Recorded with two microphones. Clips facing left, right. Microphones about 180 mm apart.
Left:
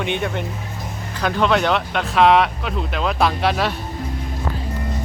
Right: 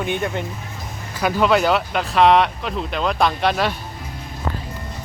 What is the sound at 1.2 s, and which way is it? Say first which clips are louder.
Speech: right 1 dB; 5° right (ahead or behind).